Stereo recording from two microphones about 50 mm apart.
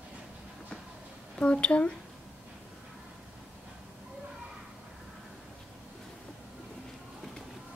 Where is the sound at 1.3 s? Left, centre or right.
Left.